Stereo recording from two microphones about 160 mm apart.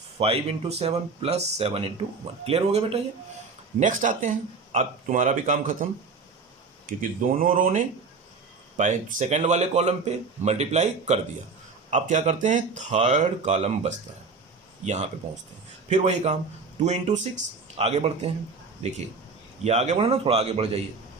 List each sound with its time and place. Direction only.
0.2 s speech: 40° right (ahead or behind)
3.8 s speech: 50° right (ahead or behind)